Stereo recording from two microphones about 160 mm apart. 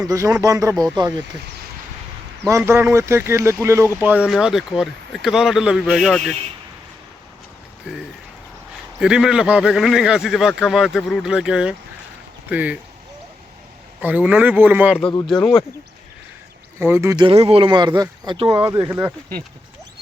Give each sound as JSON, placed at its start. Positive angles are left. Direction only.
{"t": 0.0, "sound": "speech", "side_deg": -20}
{"t": 2.5, "sound": "a man's voice", "side_deg": -15}
{"t": 7.9, "sound": "a man's voice", "side_deg": -5}
{"t": 14.0, "sound": "a man's voice", "side_deg": -10}
{"t": 15.3, "sound": "a man's voice", "side_deg": 0}
{"t": 16.8, "sound": "a man's voice", "side_deg": -15}
{"t": 17.2, "sound": "speech", "side_deg": -35}
{"t": 18.6, "sound": "a man's voice", "side_deg": -20}